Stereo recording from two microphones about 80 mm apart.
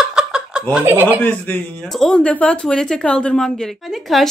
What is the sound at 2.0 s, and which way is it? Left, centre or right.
Mantra, centre.